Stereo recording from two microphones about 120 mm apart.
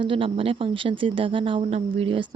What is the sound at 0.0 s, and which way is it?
Speech, 45° right (ahead or behind).